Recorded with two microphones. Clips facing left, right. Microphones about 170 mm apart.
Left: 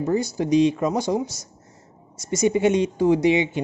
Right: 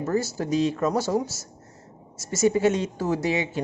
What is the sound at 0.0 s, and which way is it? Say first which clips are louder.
Speech: left 3 dB; 15° left (ahead or behind).